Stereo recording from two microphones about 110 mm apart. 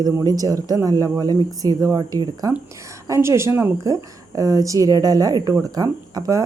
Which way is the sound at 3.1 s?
25° right (ahead or behind).